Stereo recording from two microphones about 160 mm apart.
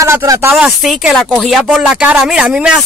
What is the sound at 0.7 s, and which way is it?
Speech, 5° right (ahead or behind).